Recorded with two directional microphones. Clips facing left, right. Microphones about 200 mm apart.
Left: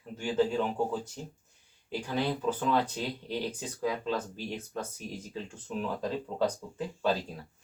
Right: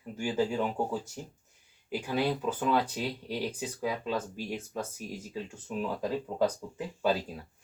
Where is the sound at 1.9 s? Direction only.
10° right (ahead or behind).